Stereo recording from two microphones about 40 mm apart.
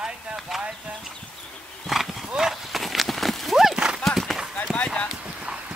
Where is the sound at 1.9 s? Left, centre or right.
Centre.